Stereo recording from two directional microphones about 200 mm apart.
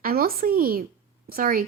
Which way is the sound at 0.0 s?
50° right (ahead or behind).